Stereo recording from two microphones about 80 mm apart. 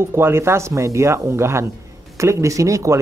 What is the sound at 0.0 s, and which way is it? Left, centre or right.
A man's voice, right.